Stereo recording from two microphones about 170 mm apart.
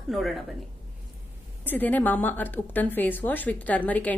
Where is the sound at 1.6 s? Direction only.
10° left (ahead or behind).